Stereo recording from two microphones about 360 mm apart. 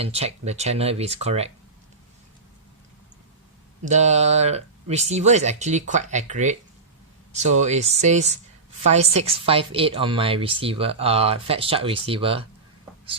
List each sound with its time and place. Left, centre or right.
0.0 s a woman's voice: centre
3.8 s a woman's voice: centre